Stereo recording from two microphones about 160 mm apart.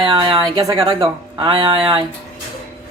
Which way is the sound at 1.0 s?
35° right (ahead or behind).